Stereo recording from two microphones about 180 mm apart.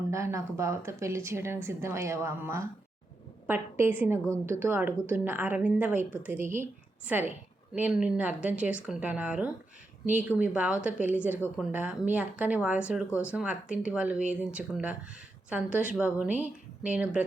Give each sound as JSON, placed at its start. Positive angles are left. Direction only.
{"t": 0.1, "sound": "a woman's voice", "side_deg": -15}